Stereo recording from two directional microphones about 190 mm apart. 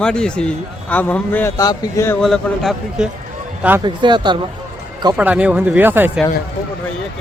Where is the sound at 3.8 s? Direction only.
25° right (ahead or behind).